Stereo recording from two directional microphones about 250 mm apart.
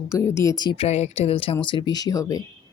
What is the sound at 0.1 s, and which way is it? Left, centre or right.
Speech, centre.